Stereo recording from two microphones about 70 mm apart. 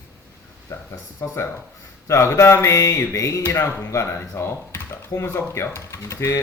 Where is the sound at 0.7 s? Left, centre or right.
Left.